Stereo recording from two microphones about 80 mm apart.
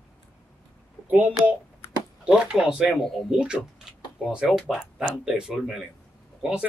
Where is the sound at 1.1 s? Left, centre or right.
Right.